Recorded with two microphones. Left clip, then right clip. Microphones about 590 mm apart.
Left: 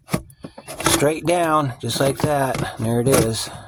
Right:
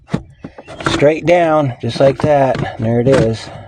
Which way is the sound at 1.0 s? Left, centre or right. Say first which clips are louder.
Right 10 dB; left.